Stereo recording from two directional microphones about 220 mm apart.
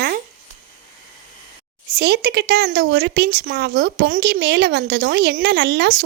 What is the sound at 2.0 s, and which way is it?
Speech, 50° right (ahead or behind).